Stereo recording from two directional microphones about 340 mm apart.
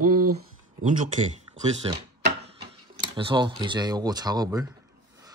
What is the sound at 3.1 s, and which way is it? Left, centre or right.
A man's voice, centre.